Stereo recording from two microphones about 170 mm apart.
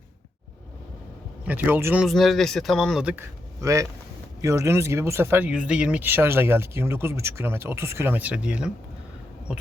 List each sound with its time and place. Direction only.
1.5 s speech: 10° right (ahead or behind)
2.0 s speech: centre (ahead or behind)
3.6 s speech: 20° right (ahead or behind)